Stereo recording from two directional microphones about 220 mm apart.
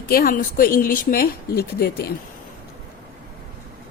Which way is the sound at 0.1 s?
40° left (ahead or behind).